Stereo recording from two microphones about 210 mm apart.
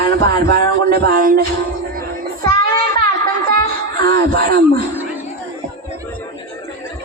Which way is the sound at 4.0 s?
45° right (ahead or behind).